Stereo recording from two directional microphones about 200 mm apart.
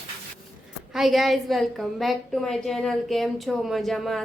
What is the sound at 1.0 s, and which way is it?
A woman's voice, centre (ahead or behind).